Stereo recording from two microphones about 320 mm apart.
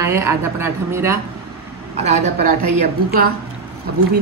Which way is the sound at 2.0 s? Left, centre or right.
Right.